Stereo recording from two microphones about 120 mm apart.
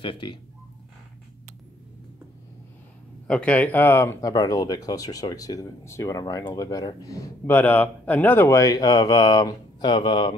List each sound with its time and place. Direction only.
0.0 s speech: 45° left (ahead or behind)
3.3 s speech: 10° left (ahead or behind)
4.3 s speech: 30° left (ahead or behind)
7.4 s speech: 15° left (ahead or behind); by 10.3 s 45° left (ahead or behind)